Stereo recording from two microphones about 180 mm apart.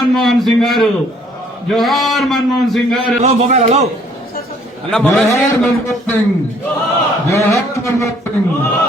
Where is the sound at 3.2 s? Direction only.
40° right (ahead or behind).